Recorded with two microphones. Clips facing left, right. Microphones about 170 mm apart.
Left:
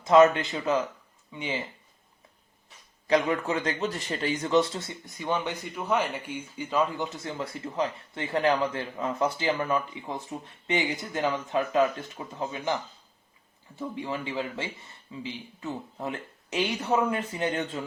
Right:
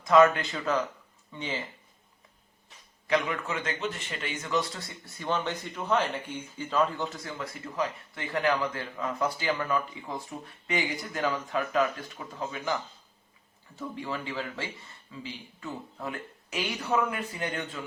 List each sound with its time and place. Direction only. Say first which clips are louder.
0.0 s a man's voice: left 2 dB; 25° left (ahead or behind)
3.1 s a man's voice: left 4 dB; 35° left (ahead or behind)